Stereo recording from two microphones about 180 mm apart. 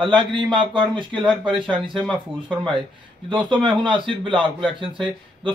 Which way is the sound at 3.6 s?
25° right (ahead or behind).